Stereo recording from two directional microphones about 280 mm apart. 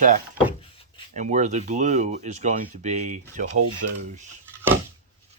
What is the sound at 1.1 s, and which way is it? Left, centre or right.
Speech, right.